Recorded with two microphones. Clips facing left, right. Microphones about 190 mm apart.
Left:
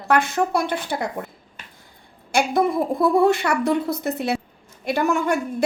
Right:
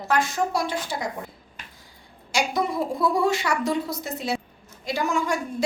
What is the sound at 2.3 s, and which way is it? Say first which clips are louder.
A woman's voice: left 5 dB; 55° left (ahead or behind).